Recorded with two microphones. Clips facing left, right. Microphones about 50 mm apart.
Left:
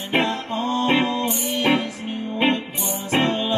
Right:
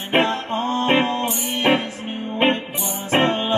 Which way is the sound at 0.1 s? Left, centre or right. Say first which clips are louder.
Right 3 dB; right.